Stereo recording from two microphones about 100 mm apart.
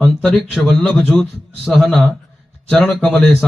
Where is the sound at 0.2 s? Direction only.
Centre (ahead or behind).